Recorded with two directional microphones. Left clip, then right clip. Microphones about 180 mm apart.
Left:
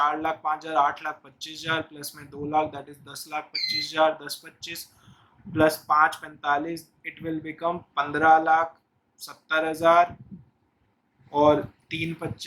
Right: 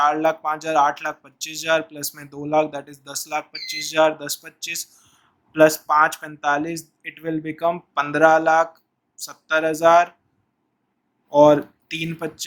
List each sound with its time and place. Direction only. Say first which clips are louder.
0.0 s speech: right 6 dB; 45° right (ahead or behind)
11.3 s speech: right 7 dB; 45° right (ahead or behind)